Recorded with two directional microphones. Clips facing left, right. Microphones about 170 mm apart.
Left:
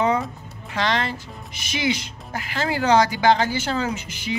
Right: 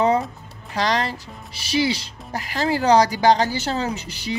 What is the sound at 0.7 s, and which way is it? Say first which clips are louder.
A woman's voice: right 1 dB; 35° right (ahead or behind).